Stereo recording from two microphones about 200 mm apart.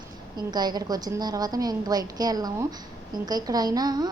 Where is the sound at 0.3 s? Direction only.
20° right (ahead or behind).